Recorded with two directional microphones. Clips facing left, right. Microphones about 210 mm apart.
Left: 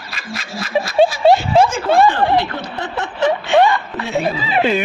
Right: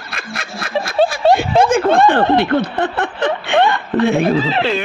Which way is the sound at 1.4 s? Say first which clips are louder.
Right 1 dB; 55° right (ahead or behind).